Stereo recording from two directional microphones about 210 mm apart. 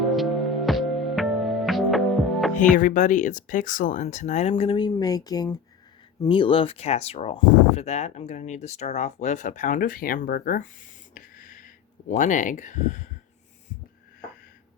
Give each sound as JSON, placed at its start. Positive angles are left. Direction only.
{"t": 0.0, "sound": "music", "side_deg": 0}
{"t": 2.7, "sound": "speech", "side_deg": 40}
{"t": 11.1, "sound": "a sound", "side_deg": 40}